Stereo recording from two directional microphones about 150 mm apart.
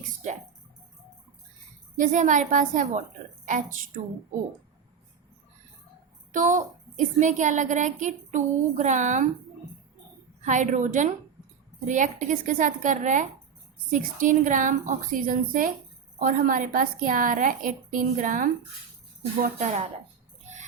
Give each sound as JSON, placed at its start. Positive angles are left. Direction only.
{"t": 2.0, "sound": "a woman's voice", "side_deg": -55}
{"t": 6.3, "sound": "a woman's voice", "side_deg": -60}
{"t": 10.4, "sound": "a woman's voice", "side_deg": -55}
{"t": 19.4, "sound": "speech", "side_deg": -55}